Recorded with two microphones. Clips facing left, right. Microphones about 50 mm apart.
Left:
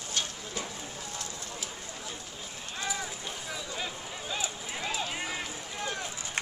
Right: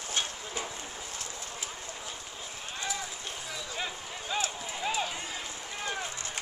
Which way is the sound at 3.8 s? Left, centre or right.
Centre.